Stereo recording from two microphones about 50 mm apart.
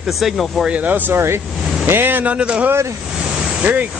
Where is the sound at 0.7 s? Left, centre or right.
Right.